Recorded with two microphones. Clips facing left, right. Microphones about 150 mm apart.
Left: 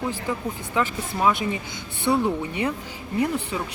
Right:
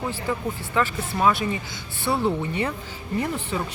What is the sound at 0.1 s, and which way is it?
Speech, 15° left (ahead or behind).